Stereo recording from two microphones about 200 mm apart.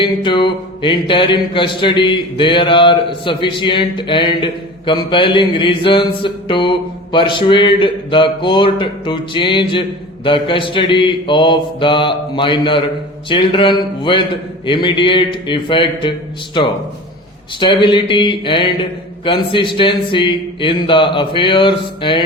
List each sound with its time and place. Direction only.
0.0 s mantra: 25° left (ahead or behind)